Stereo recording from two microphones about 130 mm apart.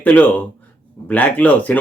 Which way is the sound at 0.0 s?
10° left (ahead or behind).